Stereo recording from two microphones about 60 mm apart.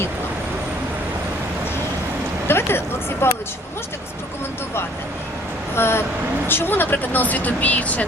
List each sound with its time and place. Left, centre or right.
2.5 s speech: left
5.7 s vehicle: left
6.5 s speech: left